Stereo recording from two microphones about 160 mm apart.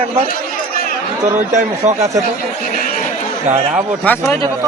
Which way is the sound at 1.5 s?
45° right (ahead or behind).